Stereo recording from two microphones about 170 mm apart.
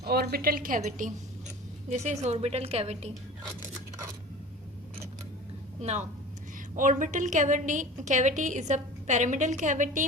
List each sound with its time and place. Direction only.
0.0 s a woman's voice: 65° right (ahead or behind); by 1.1 s 50° right (ahead or behind)
2.2 s a woman's voice: 40° right (ahead or behind)
5.8 s a woman's voice: 40° right (ahead or behind)